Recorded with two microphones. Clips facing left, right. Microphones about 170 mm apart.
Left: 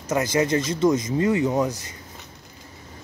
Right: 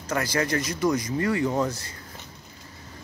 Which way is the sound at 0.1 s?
20° left (ahead or behind).